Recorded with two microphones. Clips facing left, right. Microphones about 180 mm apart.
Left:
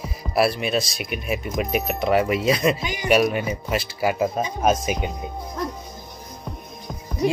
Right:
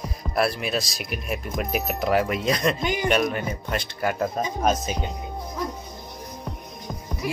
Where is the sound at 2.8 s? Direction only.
55° right (ahead or behind).